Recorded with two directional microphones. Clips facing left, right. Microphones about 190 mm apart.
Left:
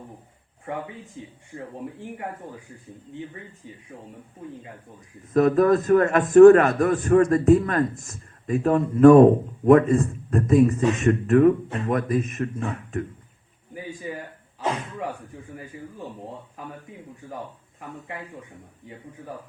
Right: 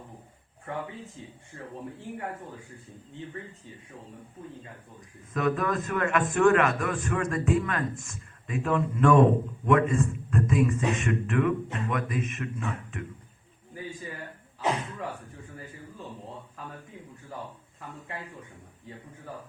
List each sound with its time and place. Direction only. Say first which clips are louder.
1.2 s speech: left 5 dB; 15° left (ahead or behind)
5.3 s a man's voice: left 10 dB; 35° left (ahead or behind)